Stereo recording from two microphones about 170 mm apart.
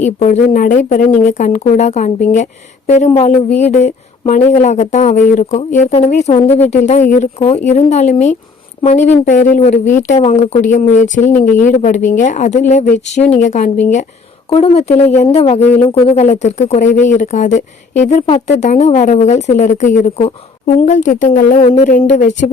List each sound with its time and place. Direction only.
0.0 s speech: 45° left (ahead or behind)
14.5 s speech: 35° left (ahead or behind)